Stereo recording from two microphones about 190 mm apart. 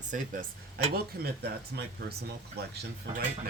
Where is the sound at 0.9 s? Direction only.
55° right (ahead or behind).